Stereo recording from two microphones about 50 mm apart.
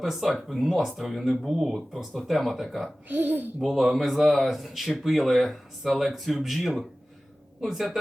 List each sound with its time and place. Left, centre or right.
0.0 s speech: centre
3.1 s speech: right
3.6 s speech: centre